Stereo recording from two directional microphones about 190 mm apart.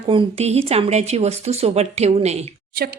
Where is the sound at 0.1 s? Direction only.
30° right (ahead or behind).